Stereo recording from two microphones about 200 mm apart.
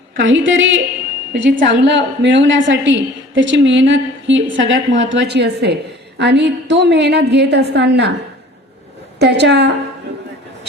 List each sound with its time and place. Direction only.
0.2 s a woman's voice: 70° right (ahead or behind)
9.1 s a woman's voice: 55° right (ahead or behind)